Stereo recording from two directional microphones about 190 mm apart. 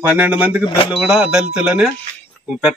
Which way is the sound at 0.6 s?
25° left (ahead or behind).